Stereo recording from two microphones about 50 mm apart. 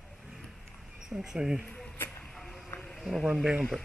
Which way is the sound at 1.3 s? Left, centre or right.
Centre.